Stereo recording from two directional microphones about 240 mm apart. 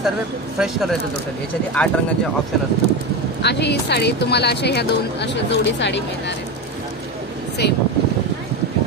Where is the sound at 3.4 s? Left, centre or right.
Left.